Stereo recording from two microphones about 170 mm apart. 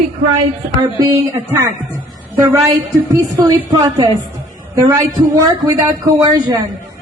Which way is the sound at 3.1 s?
20° right (ahead or behind).